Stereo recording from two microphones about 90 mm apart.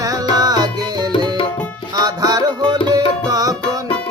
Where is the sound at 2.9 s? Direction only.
40° right (ahead or behind).